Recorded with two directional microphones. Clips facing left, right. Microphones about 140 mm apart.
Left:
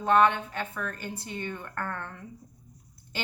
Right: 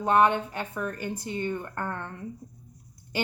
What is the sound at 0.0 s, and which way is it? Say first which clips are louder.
A woman's voice: right 1 dB; 15° right (ahead or behind).